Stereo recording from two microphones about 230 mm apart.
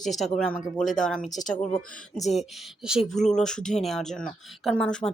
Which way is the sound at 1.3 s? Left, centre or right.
Left.